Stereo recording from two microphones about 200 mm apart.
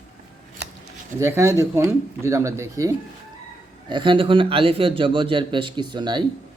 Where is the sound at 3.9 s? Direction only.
25° right (ahead or behind).